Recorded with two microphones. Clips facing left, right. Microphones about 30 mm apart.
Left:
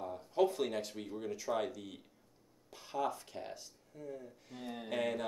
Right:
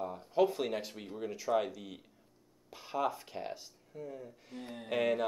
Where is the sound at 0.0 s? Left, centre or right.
Centre.